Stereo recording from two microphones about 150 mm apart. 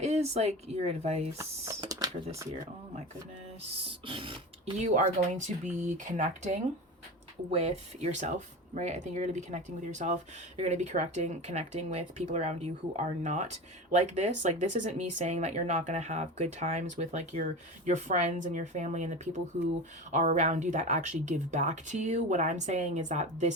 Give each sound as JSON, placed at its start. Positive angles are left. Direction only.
{"t": 0.0, "sound": "speech", "side_deg": -45}
{"t": 1.8, "sound": "computer keyboard", "side_deg": -25}
{"t": 4.0, "sound": "beatboxing", "side_deg": -35}
{"t": 4.8, "sound": "speech", "side_deg": -55}